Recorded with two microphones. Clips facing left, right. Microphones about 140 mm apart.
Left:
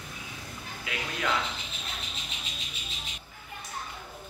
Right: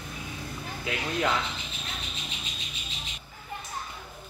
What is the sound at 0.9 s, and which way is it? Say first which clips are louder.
Speech: right 4 dB; 30° right (ahead or behind).